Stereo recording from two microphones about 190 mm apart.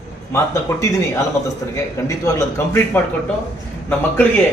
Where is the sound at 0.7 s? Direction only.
20° left (ahead or behind).